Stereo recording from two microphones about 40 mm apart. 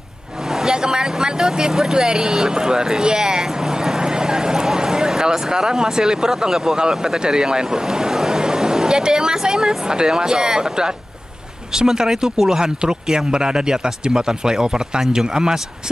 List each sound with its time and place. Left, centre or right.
0.5 s vehicle: centre
5.5 s speech: centre